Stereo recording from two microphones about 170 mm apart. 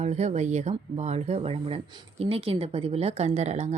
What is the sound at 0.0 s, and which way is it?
Speech, 40° right (ahead or behind).